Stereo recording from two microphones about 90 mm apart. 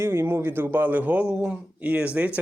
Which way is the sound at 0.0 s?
30° right (ahead or behind).